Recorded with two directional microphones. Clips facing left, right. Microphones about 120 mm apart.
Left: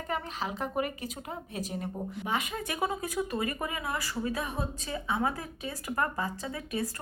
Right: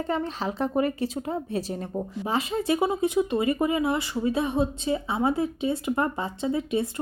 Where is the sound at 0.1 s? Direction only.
35° right (ahead or behind).